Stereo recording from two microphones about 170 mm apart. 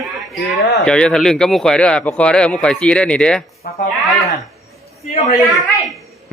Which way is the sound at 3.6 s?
60° left (ahead or behind).